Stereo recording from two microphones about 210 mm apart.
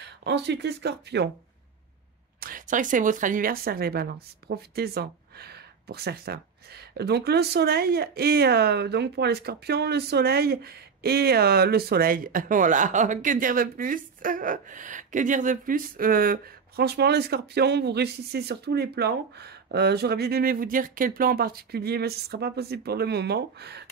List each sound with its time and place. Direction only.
0.0 s speech: 55° right (ahead or behind)
2.4 s speech: 40° right (ahead or behind)